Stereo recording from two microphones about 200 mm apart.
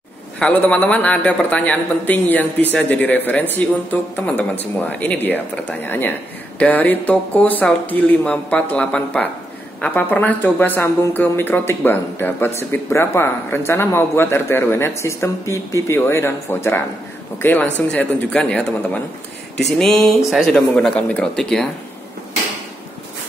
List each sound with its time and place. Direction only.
0.4 s a woman's voice: 5° left (ahead or behind)